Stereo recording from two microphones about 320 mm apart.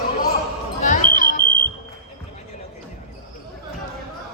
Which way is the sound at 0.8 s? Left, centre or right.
Left.